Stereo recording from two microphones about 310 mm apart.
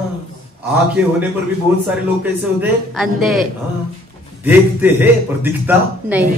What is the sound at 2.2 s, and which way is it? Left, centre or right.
A man's voice, centre.